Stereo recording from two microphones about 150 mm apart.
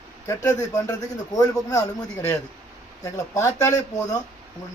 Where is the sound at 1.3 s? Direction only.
20° left (ahead or behind).